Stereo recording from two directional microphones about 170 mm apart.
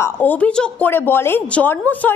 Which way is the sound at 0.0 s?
10° left (ahead or behind).